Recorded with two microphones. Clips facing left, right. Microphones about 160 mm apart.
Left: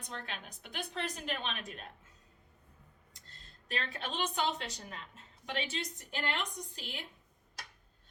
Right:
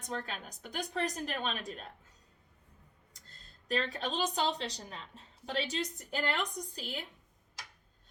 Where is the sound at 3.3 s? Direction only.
40° right (ahead or behind).